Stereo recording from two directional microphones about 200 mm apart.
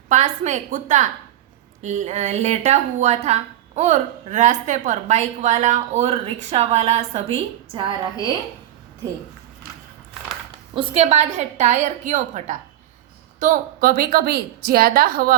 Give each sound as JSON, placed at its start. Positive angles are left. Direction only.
{"t": 0.1, "sound": "a woman's voice", "side_deg": -35}
{"t": 10.8, "sound": "a woman's voice", "side_deg": -30}